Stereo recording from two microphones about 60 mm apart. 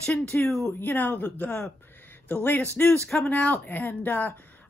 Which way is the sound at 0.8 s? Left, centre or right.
Left.